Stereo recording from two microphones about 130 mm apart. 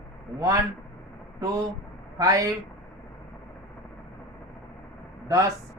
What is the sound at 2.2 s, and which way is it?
Speech, 25° right (ahead or behind).